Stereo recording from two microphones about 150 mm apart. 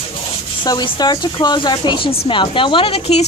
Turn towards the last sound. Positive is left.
turn(degrees=45)  # may be behind; listen again after turning